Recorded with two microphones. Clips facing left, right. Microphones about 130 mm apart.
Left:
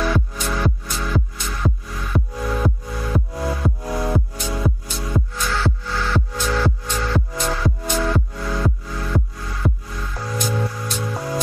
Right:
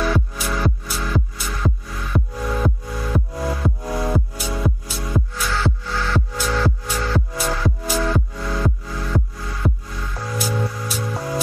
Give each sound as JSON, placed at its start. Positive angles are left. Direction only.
{"t": 0.0, "sound": "music", "side_deg": 0}